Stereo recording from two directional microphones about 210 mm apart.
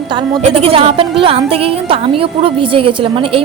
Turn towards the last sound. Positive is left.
turn(degrees=-25)  # may be behind; listen again after turning